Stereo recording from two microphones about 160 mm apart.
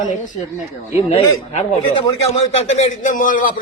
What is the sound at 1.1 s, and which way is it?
A man's voice, 40° left (ahead or behind).